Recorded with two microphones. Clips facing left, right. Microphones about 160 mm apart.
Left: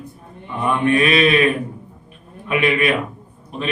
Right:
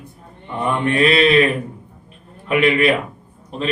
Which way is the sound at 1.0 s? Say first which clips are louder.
Right 6 dB; 30° right (ahead or behind).